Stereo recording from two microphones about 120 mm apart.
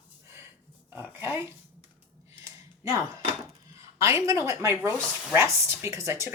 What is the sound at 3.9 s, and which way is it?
Speech, 25° right (ahead or behind).